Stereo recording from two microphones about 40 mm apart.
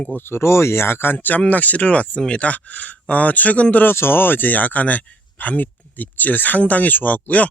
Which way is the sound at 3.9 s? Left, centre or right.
Left.